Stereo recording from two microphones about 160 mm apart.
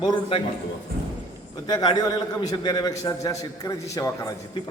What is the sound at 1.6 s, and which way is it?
A man's voice, 25° left (ahead or behind).